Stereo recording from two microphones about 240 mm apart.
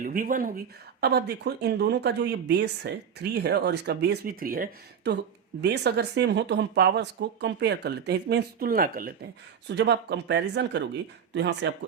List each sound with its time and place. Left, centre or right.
0.0 s speech: right